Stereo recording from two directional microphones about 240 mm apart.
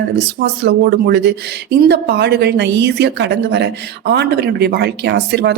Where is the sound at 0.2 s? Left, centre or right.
Right.